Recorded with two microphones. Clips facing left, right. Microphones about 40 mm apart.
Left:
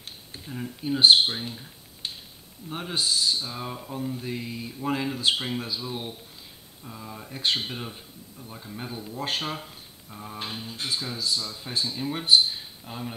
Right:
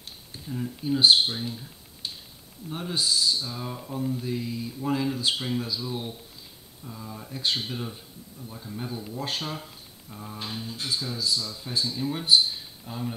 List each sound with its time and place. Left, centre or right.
0.3 s speech: centre